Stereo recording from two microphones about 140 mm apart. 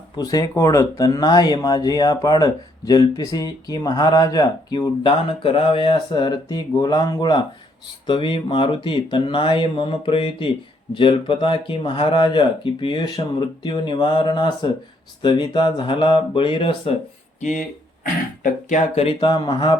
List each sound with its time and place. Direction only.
0.2 s speech: 25° left (ahead or behind)
17.4 s speech: 75° left (ahead or behind)
19.0 s speech: 35° left (ahead or behind)